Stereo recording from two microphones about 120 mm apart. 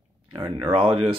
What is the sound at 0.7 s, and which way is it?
Speech, 45° right (ahead or behind).